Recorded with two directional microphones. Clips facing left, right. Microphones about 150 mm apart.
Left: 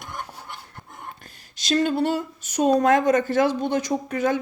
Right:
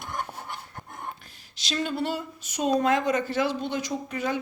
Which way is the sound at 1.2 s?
50° left (ahead or behind).